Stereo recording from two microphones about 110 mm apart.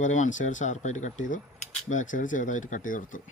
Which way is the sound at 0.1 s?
90° left.